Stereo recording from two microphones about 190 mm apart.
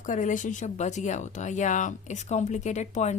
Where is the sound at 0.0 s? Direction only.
40° left (ahead or behind).